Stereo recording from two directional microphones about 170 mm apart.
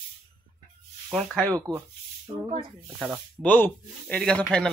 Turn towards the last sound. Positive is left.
turn(degrees=5)  # may be behind; listen again after turning